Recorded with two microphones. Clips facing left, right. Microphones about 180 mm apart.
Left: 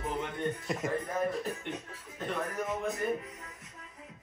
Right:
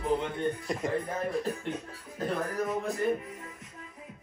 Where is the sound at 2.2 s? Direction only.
35° right (ahead or behind).